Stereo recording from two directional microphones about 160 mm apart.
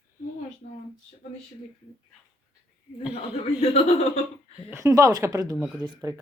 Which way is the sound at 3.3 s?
40° left (ahead or behind).